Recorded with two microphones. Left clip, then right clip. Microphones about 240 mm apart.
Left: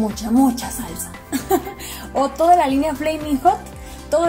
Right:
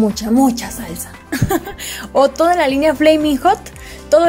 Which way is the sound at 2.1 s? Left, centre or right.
Right.